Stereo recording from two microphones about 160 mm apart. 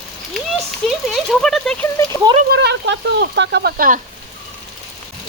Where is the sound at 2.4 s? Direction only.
90° right; by 4.0 s 60° right (ahead or behind).